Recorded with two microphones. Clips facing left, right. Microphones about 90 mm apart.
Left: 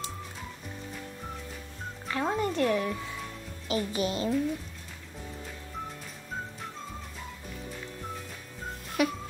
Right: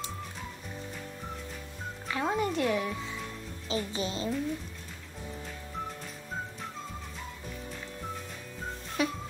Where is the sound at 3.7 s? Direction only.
25° right (ahead or behind).